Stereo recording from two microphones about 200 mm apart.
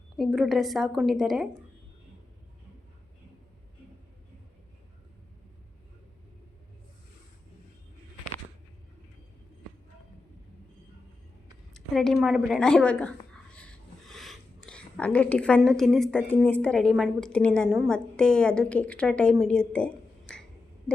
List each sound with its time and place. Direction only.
0.2 s a woman's voice: centre (ahead or behind)
11.7 s a sound: centre (ahead or behind)
16.5 s a woman's voice: 5° left (ahead or behind)